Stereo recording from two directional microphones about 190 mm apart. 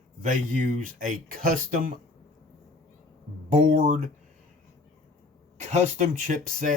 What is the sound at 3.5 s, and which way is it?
Speech, 45° right (ahead or behind).